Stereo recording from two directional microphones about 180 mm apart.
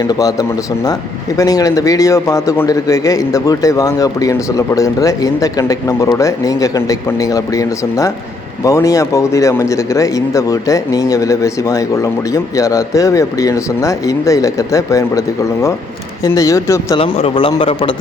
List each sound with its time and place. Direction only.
0.1 s a man's voice: 20° left (ahead or behind)
16.2 s speech: 20° left (ahead or behind)
17.0 s a man's voice: 30° left (ahead or behind)